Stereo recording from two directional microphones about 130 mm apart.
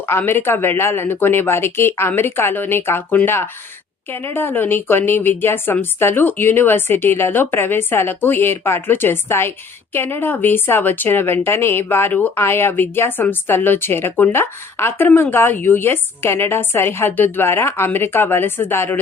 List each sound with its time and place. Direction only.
0.0 s speech: 15° left (ahead or behind)